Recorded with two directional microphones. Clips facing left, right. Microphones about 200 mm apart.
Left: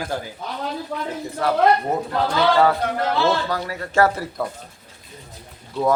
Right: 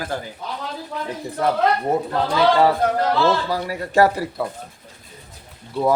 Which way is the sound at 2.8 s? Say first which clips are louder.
Right 4 dB; 40° right (ahead or behind).